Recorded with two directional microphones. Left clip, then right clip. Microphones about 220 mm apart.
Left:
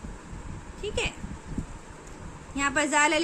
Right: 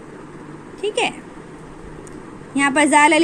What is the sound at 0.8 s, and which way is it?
Speech, 20° right (ahead or behind).